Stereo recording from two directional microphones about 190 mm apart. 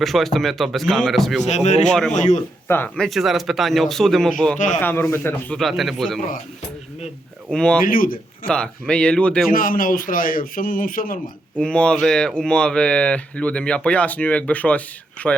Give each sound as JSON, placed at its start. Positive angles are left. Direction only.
{"t": 0.0, "sound": "speech", "side_deg": 0}
{"t": 1.5, "sound": "speech", "side_deg": 35}
{"t": 1.9, "sound": "speech", "side_deg": 5}
{"t": 2.1, "sound": "speech", "side_deg": 40}
{"t": 2.6, "sound": "speech", "side_deg": 10}
{"t": 4.5, "sound": "speech", "side_deg": 40}
{"t": 4.8, "sound": "a man's voice", "side_deg": 10}
{"t": 5.5, "sound": "speech", "side_deg": 0}
{"t": 7.5, "sound": "speech", "side_deg": 5}
{"t": 7.9, "sound": "a man's voice", "side_deg": 50}
{"t": 8.4, "sound": "speech", "side_deg": 5}
{"t": 9.5, "sound": "a man's voice", "side_deg": 45}
{"t": 11.5, "sound": "speech", "side_deg": 5}